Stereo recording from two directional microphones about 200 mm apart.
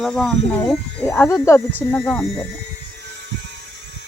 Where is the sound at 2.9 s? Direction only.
60° right (ahead or behind).